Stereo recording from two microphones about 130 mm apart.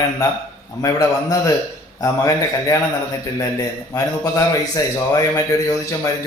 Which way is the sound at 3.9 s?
30° left (ahead or behind).